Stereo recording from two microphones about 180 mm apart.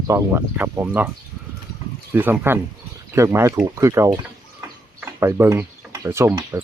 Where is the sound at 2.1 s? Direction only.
10° right (ahead or behind).